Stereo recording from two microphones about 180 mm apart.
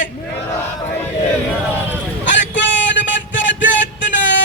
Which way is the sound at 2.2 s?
90° left.